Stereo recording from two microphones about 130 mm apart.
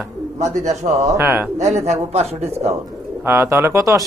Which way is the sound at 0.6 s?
60° right (ahead or behind).